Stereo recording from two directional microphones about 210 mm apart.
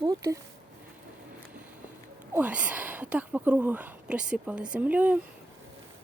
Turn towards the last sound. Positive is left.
turn(degrees=-5)  # may be behind; listen again after turning